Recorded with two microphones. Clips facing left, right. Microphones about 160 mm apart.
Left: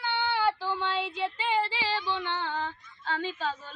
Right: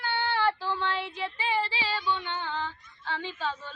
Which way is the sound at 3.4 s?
40° left (ahead or behind).